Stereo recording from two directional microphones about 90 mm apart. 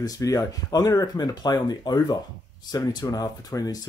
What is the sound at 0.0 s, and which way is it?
Speech, 40° left (ahead or behind).